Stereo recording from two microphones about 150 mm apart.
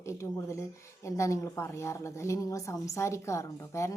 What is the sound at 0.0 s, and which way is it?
Speech, 20° left (ahead or behind).